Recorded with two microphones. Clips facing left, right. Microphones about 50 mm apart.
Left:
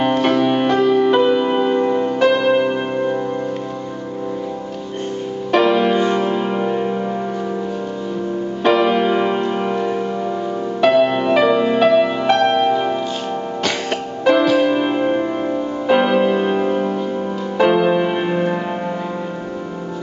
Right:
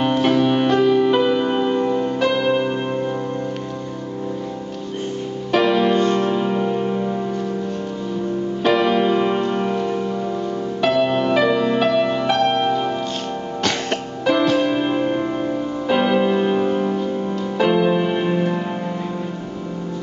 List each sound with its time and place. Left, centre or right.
0.2 s music: centre
1.8 s music: left
2.1 s music: centre
5.5 s music: centre
8.6 s music: centre
14.2 s music: centre